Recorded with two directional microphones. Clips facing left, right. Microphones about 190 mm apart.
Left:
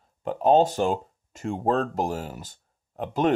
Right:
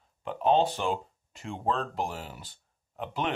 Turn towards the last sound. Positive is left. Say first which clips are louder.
# left 8 dB
turn(degrees=40)  # may be behind; listen again after turning